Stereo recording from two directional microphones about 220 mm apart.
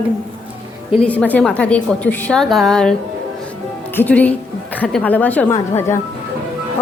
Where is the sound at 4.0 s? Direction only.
5° left (ahead or behind).